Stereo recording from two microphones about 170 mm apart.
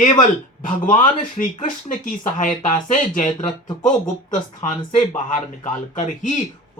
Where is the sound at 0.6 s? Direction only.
50° left (ahead or behind).